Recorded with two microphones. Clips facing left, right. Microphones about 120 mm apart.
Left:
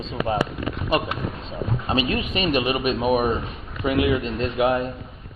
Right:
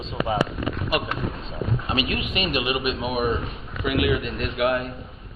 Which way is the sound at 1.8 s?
30° left (ahead or behind).